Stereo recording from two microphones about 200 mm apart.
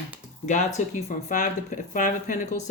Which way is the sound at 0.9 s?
35° left (ahead or behind).